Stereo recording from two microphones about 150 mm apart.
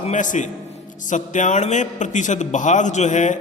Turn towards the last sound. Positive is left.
turn(degrees=55)  # may be behind; listen again after turning